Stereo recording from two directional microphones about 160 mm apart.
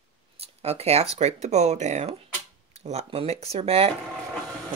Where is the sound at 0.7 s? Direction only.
40° right (ahead or behind).